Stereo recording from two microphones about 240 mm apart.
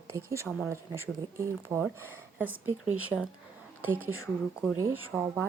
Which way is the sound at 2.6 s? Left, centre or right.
Right.